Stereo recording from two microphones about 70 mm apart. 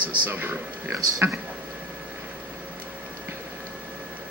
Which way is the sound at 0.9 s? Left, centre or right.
Right.